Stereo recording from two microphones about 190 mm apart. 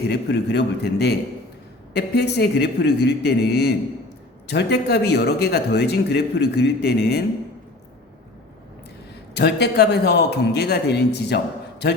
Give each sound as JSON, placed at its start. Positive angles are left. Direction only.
{"t": 0.1, "sound": "speech", "side_deg": 60}
{"t": 9.3, "sound": "speech", "side_deg": 60}